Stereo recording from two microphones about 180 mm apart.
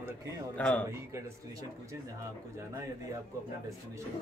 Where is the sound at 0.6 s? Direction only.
5° left (ahead or behind).